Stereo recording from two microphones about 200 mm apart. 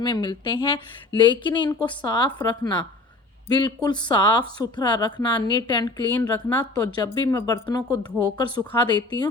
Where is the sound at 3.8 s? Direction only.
20° left (ahead or behind).